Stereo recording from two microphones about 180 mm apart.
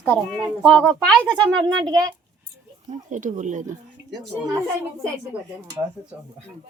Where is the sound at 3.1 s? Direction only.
45° right (ahead or behind).